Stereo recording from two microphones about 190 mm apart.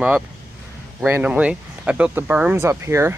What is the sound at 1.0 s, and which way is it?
Speech, 10° right (ahead or behind).